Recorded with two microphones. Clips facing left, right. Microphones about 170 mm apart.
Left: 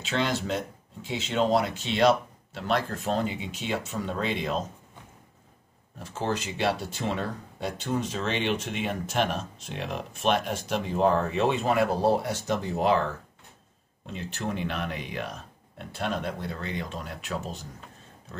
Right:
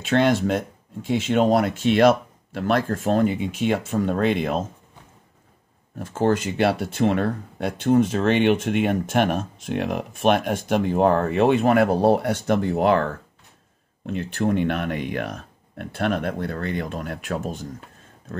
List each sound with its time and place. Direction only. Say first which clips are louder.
0.0 s speech: right 9 dB; 55° right (ahead or behind)
5.9 s speech: right 9 dB; 55° right (ahead or behind)